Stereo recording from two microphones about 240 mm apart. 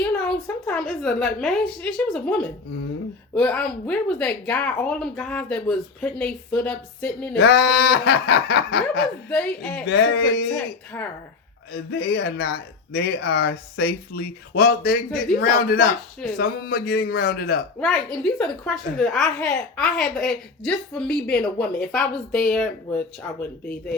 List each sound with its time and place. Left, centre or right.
0.0 s a woman's voice: centre
7.3 s speech: left
9.3 s a woman's voice: centre
9.8 s speech: left
10.9 s speech: centre
11.7 s speech: left
17.7 s a woman's voice: centre